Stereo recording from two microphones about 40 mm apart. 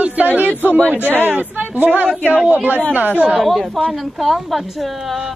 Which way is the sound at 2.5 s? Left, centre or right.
Right.